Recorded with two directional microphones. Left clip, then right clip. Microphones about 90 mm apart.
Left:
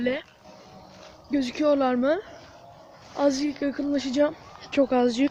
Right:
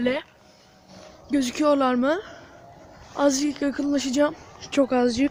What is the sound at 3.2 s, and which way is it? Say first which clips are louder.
Speech: right 2 dB; 35° right (ahead or behind).